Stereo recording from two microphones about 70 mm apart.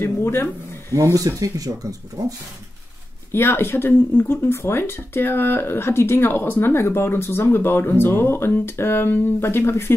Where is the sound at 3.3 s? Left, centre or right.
Left.